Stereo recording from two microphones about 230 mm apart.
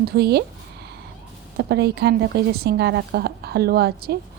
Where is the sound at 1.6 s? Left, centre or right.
Right.